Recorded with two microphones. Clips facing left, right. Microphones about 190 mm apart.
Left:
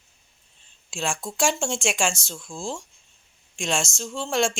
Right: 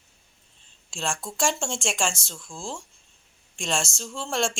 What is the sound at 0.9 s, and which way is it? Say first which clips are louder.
A woman's voice: left 2 dB; 5° left (ahead or behind).